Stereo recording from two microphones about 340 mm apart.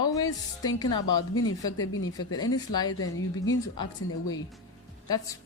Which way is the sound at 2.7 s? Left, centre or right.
Centre.